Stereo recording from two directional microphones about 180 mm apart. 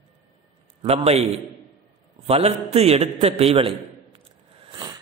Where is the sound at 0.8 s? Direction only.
35° right (ahead or behind).